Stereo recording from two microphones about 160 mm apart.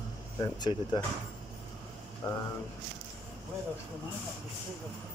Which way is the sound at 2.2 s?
25° left (ahead or behind).